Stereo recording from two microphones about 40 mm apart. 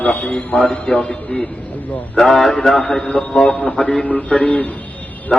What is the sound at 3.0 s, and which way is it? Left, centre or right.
A man's voice, left.